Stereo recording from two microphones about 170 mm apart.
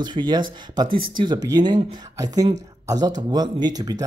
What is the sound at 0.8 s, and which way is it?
Speech, 55° right (ahead or behind).